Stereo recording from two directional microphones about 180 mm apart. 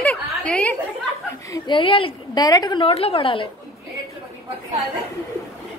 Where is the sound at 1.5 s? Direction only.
25° left (ahead or behind).